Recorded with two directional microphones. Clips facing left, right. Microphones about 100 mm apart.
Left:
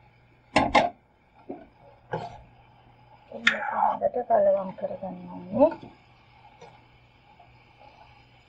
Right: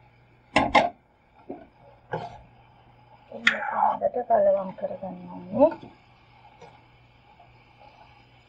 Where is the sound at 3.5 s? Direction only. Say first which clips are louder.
Right 1 dB; 10° right (ahead or behind).